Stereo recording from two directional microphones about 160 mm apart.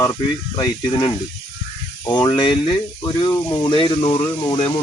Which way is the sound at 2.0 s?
25° left (ahead or behind).